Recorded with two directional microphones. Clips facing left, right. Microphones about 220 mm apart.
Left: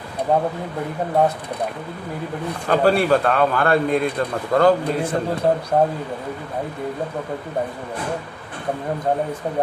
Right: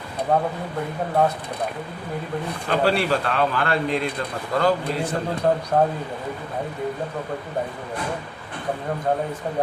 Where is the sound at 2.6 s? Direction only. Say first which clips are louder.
Left 5 dB; 50° left (ahead or behind).